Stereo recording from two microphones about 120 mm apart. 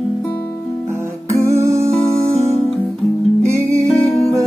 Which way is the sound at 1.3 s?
25° right (ahead or behind).